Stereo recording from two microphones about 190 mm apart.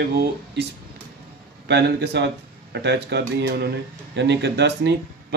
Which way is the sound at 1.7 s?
65° right (ahead or behind).